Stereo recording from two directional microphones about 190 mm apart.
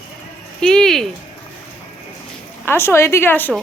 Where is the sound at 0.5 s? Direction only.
5° left (ahead or behind).